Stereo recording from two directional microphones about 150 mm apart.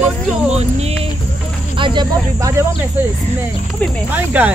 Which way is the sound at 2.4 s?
15° right (ahead or behind).